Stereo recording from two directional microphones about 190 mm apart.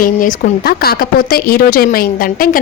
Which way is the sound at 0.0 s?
45° left (ahead or behind).